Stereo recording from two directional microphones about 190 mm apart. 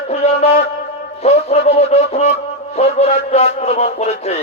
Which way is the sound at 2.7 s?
35° left (ahead or behind).